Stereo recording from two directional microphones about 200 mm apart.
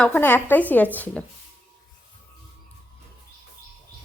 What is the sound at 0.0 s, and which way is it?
Speech, 10° left (ahead or behind).